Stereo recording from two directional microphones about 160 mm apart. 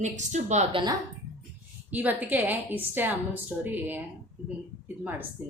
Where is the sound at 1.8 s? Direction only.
10° right (ahead or behind).